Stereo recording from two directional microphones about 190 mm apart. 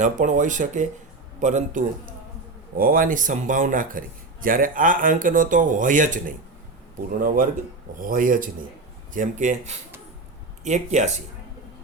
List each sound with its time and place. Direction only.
0.0 s speech: 40° right (ahead or behind)